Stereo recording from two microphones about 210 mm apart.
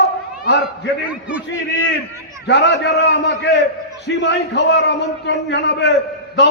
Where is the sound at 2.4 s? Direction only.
50° left (ahead or behind).